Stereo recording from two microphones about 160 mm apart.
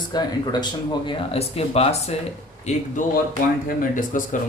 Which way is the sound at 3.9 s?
55° left (ahead or behind).